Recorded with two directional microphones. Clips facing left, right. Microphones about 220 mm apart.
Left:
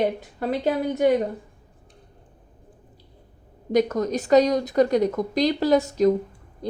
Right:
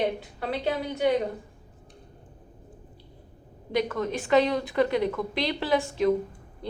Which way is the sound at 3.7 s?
45° left (ahead or behind).